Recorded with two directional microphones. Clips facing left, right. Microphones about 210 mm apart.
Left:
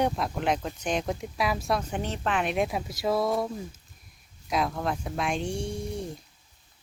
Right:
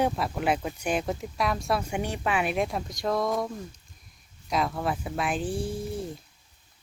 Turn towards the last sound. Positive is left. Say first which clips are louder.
# right 1 dB
turn(degrees=0)  # may be behind; listen again after turning